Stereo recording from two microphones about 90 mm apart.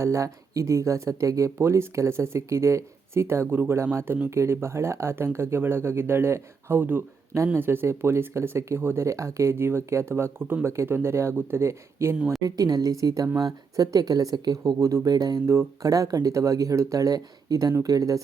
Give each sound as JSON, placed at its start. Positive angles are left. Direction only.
{"t": 0.0, "sound": "speech", "side_deg": -35}
{"t": 7.3, "sound": "speech", "side_deg": -35}
{"t": 12.4, "sound": "speech", "side_deg": -45}